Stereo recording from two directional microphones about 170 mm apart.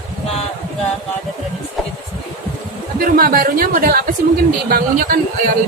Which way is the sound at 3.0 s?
55° right (ahead or behind).